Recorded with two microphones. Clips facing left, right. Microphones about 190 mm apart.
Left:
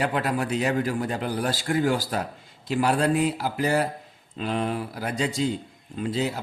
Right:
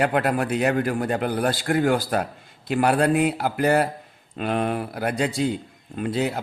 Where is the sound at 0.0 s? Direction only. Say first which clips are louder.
Right 4 dB; 60° right (ahead or behind).